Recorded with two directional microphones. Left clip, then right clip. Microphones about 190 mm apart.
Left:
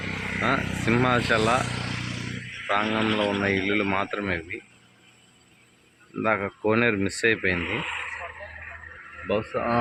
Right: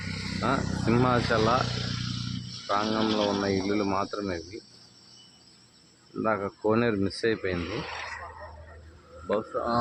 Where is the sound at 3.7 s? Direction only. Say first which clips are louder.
Left 3 dB; centre (ahead or behind).